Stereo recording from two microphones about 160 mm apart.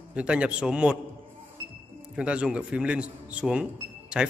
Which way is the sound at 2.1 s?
5° right (ahead or behind).